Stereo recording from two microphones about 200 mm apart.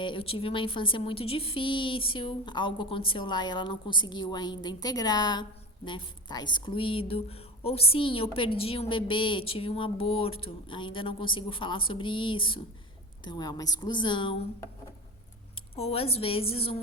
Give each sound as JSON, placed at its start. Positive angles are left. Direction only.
{"t": 0.0, "sound": "a woman's voice", "side_deg": 25}